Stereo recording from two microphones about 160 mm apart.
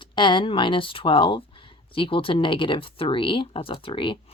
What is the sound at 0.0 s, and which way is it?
Speech, 30° left (ahead or behind).